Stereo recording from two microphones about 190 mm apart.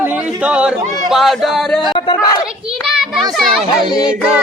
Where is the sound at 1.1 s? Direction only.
Centre (ahead or behind).